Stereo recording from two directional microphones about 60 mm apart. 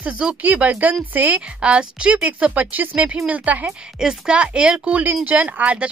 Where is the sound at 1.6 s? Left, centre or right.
Centre.